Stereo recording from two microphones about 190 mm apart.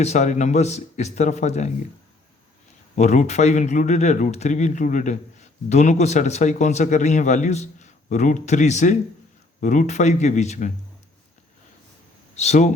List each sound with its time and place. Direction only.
0.0 s speech: 35° left (ahead or behind)
2.9 s speech: 40° left (ahead or behind)
12.4 s speech: 35° left (ahead or behind)